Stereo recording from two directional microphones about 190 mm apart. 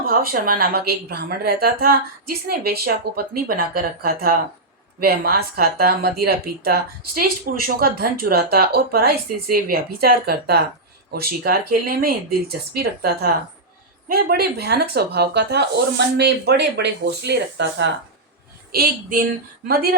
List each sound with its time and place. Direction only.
0.0 s speech: 50° right (ahead or behind)